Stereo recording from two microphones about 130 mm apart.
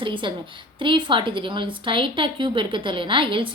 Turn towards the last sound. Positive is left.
turn(degrees=-40)  # may be behind; listen again after turning